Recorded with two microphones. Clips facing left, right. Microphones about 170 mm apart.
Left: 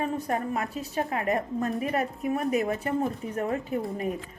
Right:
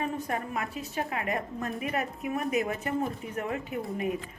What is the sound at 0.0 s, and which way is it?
A woman's voice, 40° left (ahead or behind).